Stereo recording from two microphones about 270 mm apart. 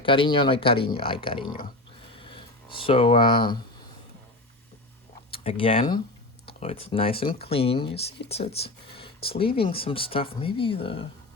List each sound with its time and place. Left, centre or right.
0.0 s speech: centre
2.1 s a sound: centre
5.3 s speech: left